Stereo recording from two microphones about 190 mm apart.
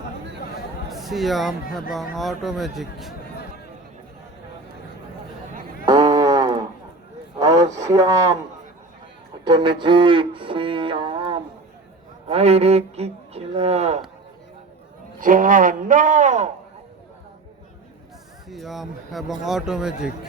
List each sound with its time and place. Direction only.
0.9 s a man's voice: centre (ahead or behind)
5.8 s a sound: 20° right (ahead or behind)
9.4 s a sound: 25° right (ahead or behind)
12.3 s a man's voice: 35° right (ahead or behind)
15.2 s a man's voice: 45° right (ahead or behind)
18.4 s a man's voice: centre (ahead or behind)